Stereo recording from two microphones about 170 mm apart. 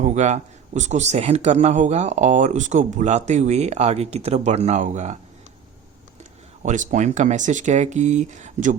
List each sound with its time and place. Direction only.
0.0 s speech: 45° right (ahead or behind)
6.6 s speech: 45° right (ahead or behind)